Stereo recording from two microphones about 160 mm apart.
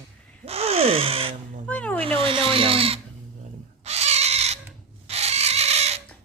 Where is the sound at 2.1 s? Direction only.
35° right (ahead or behind).